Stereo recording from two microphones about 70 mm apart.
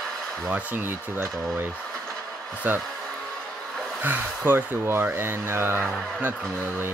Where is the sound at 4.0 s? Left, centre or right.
Right.